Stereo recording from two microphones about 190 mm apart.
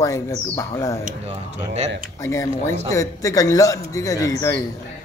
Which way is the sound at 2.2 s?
15° left (ahead or behind).